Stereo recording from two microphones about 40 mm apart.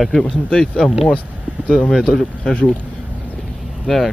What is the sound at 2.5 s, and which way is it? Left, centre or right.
Speech, left.